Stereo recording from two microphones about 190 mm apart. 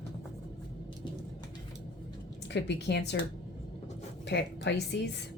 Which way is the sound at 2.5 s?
65° left (ahead or behind).